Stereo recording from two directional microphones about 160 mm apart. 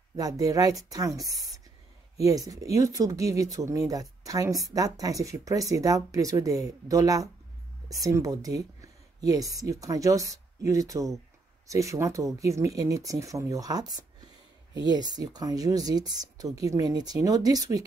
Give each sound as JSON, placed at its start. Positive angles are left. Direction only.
{"t": 0.1, "sound": "speech", "side_deg": -20}